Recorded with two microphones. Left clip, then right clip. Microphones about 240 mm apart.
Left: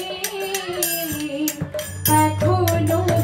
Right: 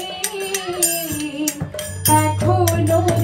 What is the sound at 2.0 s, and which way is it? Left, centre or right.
Music, right.